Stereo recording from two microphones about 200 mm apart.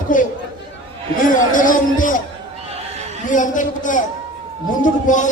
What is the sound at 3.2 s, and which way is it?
A man's voice, 40° left (ahead or behind).